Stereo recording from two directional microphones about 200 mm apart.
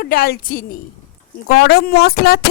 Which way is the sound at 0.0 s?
45° left (ahead or behind).